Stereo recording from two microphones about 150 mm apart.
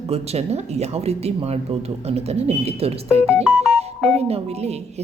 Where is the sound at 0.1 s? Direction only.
45° right (ahead or behind).